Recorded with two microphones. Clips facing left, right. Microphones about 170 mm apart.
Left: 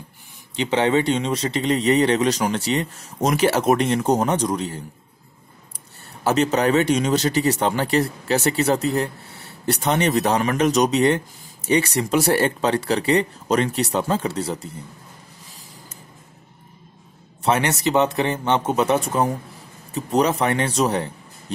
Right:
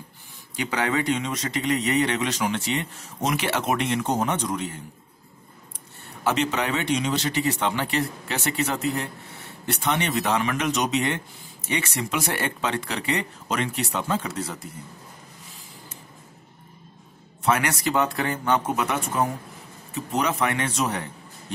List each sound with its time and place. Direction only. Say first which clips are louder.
0.6 s speech: left 6 dB; 25° left (ahead or behind)
6.2 s speech: left 6 dB; 40° left (ahead or behind)
17.4 s speech: left 3 dB; 30° left (ahead or behind)